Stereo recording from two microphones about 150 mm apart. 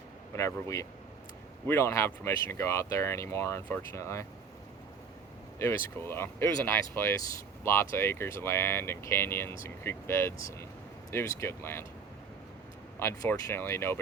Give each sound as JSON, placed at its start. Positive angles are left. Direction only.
{"t": 0.3, "sound": "speech", "side_deg": 20}
{"t": 5.5, "sound": "speech", "side_deg": 15}
{"t": 13.0, "sound": "speech", "side_deg": 15}